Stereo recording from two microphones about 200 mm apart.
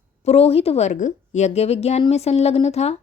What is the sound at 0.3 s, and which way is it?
A woman's voice, 30° left (ahead or behind).